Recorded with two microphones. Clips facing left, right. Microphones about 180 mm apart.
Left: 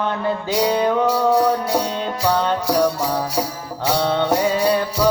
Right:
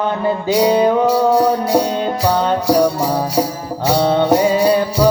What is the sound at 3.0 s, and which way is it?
Music, 30° right (ahead or behind).